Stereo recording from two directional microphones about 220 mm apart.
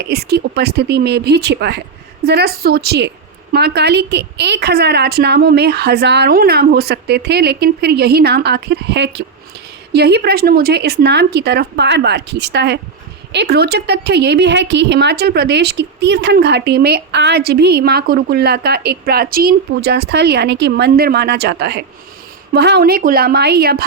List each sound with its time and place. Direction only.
0.0 s a woman's voice: 45° right (ahead or behind)